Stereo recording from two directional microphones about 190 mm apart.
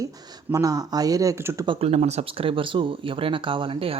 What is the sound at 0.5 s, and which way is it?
Speech, 20° right (ahead or behind).